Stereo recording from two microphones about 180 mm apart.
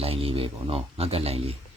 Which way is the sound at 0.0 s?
30° right (ahead or behind).